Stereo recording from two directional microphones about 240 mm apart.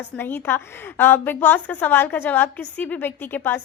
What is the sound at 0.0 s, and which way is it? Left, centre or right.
A woman's voice, centre.